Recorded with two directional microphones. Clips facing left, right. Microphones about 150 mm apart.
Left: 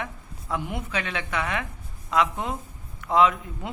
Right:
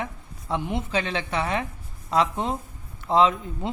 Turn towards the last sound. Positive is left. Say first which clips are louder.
# right 1 dB
turn(degrees=-30)  # may be behind; listen again after turning